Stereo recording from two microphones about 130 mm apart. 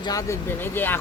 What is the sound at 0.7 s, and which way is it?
Speech, 15° left (ahead or behind).